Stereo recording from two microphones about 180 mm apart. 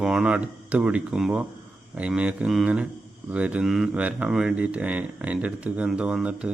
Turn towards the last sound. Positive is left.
turn(degrees=-5)  # may be behind; listen again after turning